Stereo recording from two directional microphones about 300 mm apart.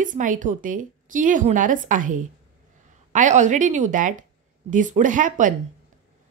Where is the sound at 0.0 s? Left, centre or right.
Right.